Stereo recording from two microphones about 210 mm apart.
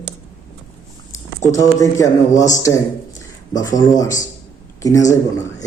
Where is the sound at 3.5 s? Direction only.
15° left (ahead or behind).